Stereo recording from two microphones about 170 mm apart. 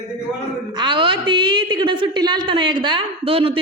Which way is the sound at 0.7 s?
25° right (ahead or behind).